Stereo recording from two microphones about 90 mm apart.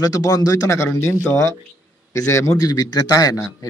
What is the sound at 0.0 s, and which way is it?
A man's voice, 45° left (ahead or behind).